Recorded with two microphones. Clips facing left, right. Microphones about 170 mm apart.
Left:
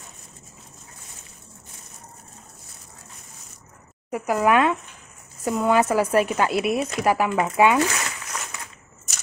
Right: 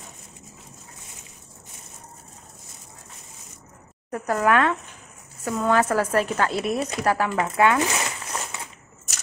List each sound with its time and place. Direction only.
4.1 s speech: 10° left (ahead or behind)
7.8 s zipper: 25° right (ahead or behind)